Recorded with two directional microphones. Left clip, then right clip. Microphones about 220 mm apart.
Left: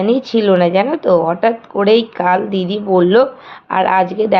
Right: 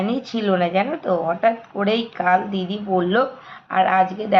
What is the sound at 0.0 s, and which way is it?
Speech, 45° left (ahead or behind).